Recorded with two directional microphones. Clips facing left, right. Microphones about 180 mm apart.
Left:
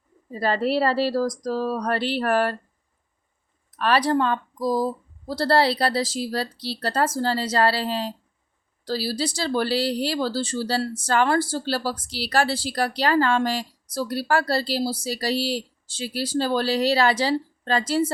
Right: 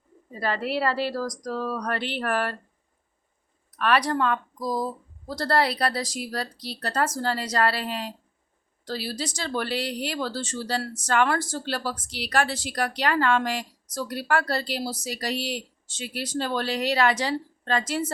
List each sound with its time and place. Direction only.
0.3 s speech: 30° left (ahead or behind)
3.8 s speech: 30° left (ahead or behind)